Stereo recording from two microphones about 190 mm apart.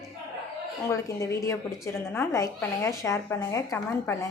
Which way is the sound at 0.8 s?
15° left (ahead or behind).